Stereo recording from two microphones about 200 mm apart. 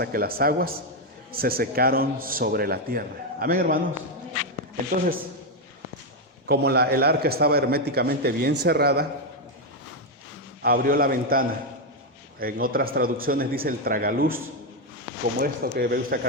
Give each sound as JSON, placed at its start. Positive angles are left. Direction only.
{"t": 0.0, "sound": "a man's voice", "side_deg": -50}
{"t": 4.9, "sound": "a man's voice", "side_deg": -45}
{"t": 6.5, "sound": "a man's voice", "side_deg": -55}
{"t": 10.6, "sound": "a man's voice", "side_deg": -50}
{"t": 15.4, "sound": "a man's voice", "side_deg": -50}